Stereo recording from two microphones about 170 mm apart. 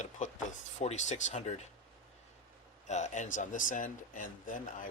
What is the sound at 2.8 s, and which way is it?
Speech, 40° left (ahead or behind).